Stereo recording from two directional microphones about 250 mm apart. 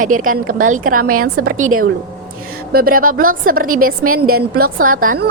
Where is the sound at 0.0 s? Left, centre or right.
Right.